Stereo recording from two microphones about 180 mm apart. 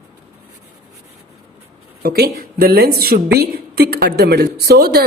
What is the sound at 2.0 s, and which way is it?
A woman's voice, 60° right (ahead or behind).